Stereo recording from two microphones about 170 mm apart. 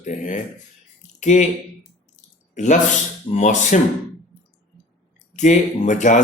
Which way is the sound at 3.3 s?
45° left (ahead or behind).